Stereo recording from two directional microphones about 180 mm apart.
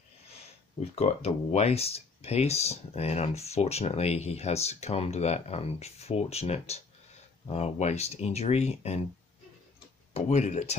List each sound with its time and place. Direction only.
0.7 s speech: 35° left (ahead or behind)
10.1 s speech: 40° left (ahead or behind)